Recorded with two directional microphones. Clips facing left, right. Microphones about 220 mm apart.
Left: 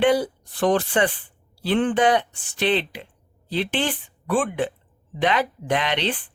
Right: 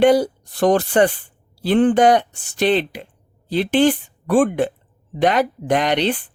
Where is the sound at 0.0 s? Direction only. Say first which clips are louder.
Right 5 dB; 40° right (ahead or behind).